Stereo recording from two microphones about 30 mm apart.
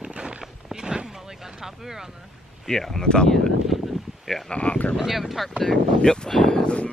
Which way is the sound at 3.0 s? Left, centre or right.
Left.